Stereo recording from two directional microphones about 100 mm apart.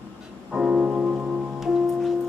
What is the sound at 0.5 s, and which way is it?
Music, 10° right (ahead or behind).